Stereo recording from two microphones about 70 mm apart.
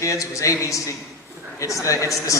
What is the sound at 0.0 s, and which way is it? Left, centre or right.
Speech, left.